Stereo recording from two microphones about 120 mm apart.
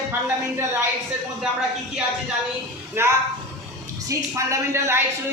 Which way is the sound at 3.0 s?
20° right (ahead or behind).